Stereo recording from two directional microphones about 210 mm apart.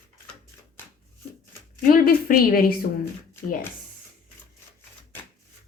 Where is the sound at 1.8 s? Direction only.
40° left (ahead or behind).